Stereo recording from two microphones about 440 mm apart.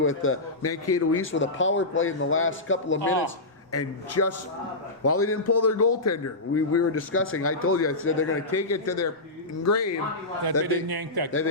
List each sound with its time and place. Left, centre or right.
0.0 s a man's voice: left
10.4 s a man's voice: right